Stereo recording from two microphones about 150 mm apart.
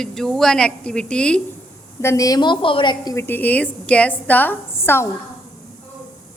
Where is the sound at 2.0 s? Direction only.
20° left (ahead or behind).